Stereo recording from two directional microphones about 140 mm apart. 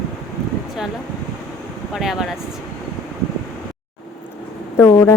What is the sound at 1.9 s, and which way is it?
Speech, 5° right (ahead or behind).